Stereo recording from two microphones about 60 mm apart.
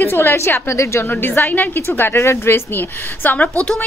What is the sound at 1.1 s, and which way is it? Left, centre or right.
A woman's voice, left.